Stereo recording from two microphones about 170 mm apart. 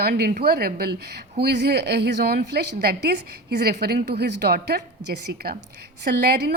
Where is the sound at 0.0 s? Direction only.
70° right (ahead or behind).